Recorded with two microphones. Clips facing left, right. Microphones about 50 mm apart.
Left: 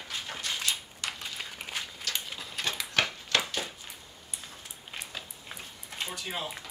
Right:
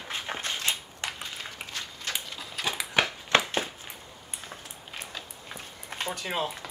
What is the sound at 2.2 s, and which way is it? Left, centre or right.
Dog, centre.